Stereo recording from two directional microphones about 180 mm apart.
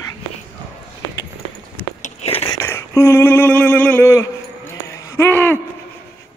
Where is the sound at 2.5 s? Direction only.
15° left (ahead or behind).